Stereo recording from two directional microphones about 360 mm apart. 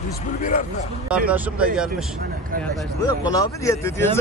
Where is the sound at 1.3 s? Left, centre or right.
Centre.